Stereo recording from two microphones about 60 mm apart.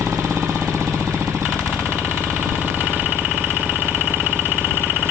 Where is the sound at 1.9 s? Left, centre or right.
Right.